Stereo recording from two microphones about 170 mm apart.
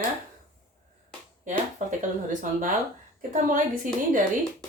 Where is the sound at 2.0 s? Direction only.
50° right (ahead or behind).